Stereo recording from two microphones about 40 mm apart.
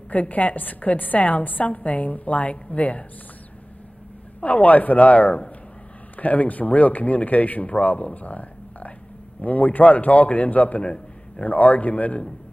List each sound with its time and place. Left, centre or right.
0.1 s a woman's voice: left
4.4 s speech: left
10.8 s a sound: left
11.4 s speech: left